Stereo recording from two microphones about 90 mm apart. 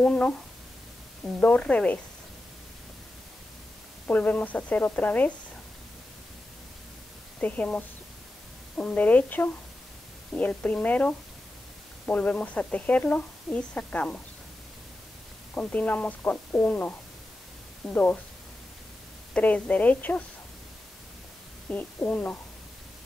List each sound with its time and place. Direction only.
0.0 s speech: 15° left (ahead or behind)
4.1 s speech: 15° left (ahead or behind)
7.3 s speech: 15° left (ahead or behind)
15.6 s speech: 15° left (ahead or behind)
19.3 s speech: 15° left (ahead or behind)
21.6 s speech: 15° left (ahead or behind)